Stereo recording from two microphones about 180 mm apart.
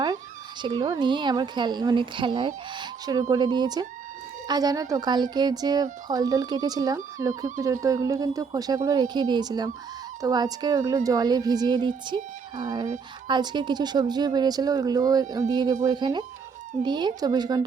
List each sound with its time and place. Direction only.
0.6 s speech: 25° right (ahead or behind)
13.2 s speech: 25° right (ahead or behind)